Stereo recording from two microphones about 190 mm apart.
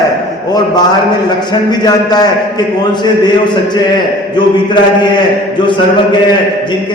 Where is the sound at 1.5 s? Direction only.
20° left (ahead or behind).